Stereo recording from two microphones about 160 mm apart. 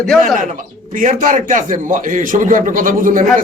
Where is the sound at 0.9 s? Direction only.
55° right (ahead or behind).